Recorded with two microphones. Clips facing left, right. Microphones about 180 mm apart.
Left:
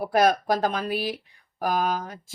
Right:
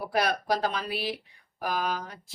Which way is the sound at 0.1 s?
45° left (ahead or behind).